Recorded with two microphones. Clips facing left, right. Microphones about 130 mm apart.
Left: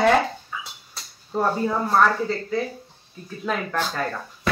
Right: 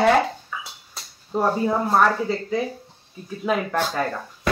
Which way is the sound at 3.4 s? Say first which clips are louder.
Right 3 dB; 10° right (ahead or behind).